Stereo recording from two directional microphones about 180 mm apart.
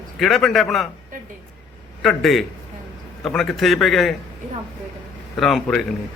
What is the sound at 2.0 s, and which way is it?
A man's voice, centre (ahead or behind).